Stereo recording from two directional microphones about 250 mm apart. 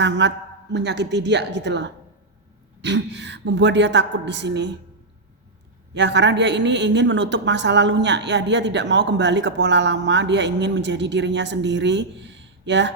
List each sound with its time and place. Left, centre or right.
0.0 s a man's voice: right
5.9 s a man's voice: right